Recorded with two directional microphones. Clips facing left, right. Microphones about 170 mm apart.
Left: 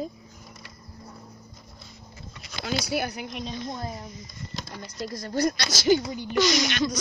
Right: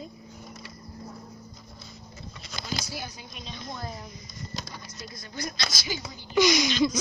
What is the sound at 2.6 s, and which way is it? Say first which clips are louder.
Speech: left 8 dB; 70° left (ahead or behind).